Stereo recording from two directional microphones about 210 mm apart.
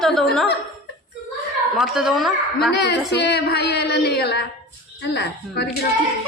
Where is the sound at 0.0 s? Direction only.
Centre (ahead or behind).